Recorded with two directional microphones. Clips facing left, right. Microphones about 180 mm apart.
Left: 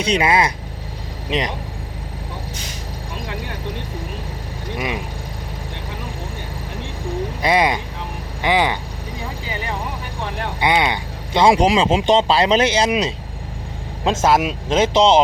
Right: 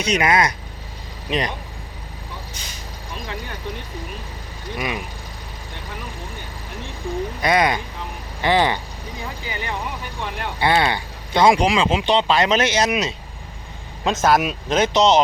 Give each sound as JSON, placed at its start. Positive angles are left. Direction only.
{"t": 0.0, "sound": "speech", "side_deg": 30}
{"t": 7.4, "sound": "speech", "side_deg": 25}
{"t": 8.4, "sound": "speech", "side_deg": 10}
{"t": 10.6, "sound": "speech", "side_deg": 15}
{"t": 11.4, "sound": "speech", "side_deg": 35}